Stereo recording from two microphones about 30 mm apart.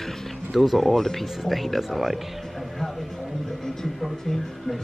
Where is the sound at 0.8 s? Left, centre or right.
Centre.